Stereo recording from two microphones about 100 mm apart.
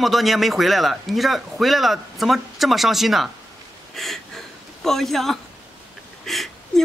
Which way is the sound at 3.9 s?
Centre (ahead or behind).